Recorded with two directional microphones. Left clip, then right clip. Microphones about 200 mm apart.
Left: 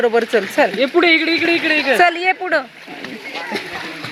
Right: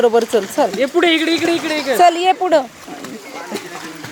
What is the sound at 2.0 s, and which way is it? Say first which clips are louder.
Speech: right 7 dB; 15° right (ahead or behind).